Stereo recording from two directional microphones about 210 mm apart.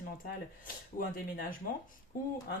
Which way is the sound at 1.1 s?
45° left (ahead or behind).